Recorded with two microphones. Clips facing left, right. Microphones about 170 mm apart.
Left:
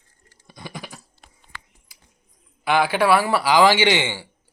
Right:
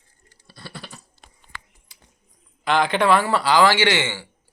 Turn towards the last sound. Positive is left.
turn(degrees=15)  # may be behind; listen again after turning